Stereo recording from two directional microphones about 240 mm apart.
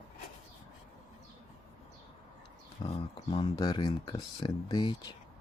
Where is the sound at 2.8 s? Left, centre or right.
Left.